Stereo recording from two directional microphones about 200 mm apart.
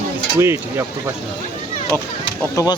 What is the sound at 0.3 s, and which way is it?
Speech, 15° right (ahead or behind).